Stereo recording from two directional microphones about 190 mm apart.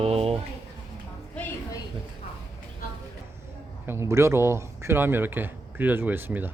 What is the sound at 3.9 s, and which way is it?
Speech, 15° right (ahead or behind).